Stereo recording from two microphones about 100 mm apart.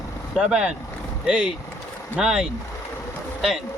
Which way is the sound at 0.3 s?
5° right (ahead or behind).